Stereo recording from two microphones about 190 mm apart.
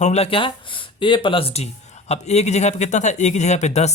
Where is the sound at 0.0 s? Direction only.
35° left (ahead or behind).